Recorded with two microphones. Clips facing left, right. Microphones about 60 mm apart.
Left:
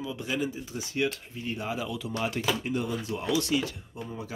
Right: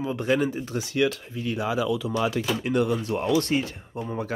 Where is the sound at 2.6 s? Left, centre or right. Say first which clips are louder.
Right 7 dB; right.